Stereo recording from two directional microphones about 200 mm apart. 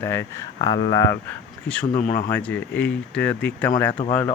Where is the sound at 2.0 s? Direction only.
40° left (ahead or behind).